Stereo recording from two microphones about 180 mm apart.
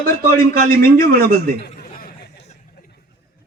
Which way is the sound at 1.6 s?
55° left (ahead or behind).